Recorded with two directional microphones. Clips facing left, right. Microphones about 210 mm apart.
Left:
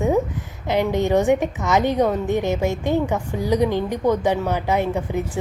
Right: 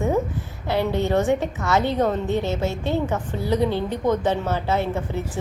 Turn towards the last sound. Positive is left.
turn(degrees=15)  # may be behind; listen again after turning